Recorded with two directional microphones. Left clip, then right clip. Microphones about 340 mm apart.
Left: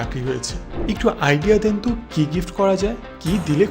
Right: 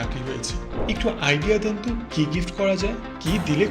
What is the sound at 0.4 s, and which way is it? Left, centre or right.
Speech, left.